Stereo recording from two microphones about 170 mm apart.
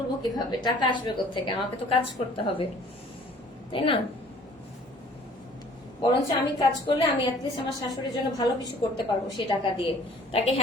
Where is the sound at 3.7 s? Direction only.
30° left (ahead or behind).